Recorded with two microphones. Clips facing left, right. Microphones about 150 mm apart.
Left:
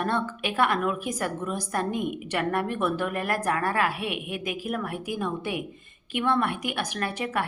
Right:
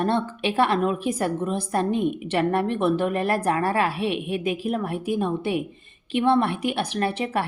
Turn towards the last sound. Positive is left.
turn(degrees=-25)  # may be behind; listen again after turning